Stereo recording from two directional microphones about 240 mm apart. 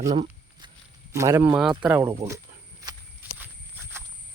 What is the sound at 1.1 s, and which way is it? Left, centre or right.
Speech, centre.